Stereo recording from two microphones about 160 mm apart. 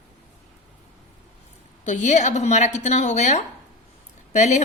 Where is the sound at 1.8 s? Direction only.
50° left (ahead or behind).